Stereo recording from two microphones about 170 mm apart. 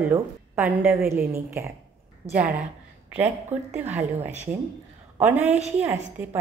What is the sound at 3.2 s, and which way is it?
Speech, 40° right (ahead or behind).